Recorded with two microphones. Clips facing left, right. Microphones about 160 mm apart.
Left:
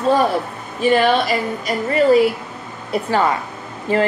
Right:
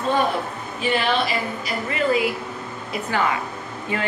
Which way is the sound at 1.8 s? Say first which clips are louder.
Left 8 dB; 40° left (ahead or behind).